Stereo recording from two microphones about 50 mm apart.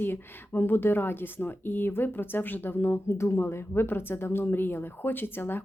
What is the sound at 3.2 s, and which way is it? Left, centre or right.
Speech, left.